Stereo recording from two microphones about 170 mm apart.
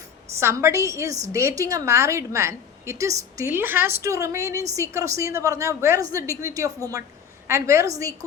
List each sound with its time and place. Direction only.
0.3 s a woman's voice: 15° right (ahead or behind)